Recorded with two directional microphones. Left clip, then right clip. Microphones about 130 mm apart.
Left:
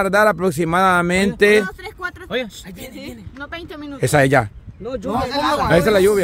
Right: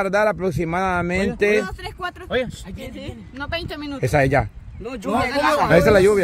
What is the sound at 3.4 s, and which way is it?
Speech, 55° right (ahead or behind).